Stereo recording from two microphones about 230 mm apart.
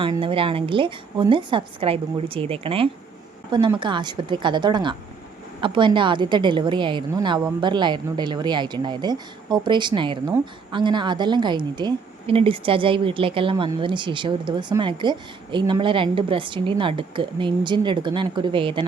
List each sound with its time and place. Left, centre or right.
0.0 s a woman's voice: right